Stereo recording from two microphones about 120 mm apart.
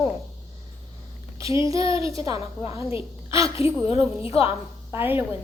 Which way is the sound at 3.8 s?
55° left (ahead or behind).